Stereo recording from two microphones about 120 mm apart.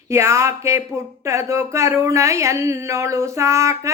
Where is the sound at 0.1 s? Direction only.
25° right (ahead or behind).